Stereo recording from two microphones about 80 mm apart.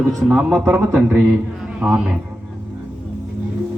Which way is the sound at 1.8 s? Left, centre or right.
Centre.